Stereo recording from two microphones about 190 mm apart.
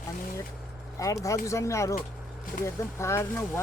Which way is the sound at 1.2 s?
15° left (ahead or behind).